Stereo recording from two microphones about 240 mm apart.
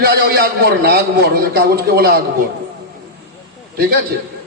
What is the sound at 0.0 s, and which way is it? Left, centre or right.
A man's voice, right.